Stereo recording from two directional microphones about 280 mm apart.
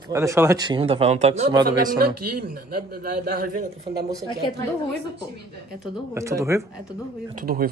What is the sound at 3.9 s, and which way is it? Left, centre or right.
Speech, centre.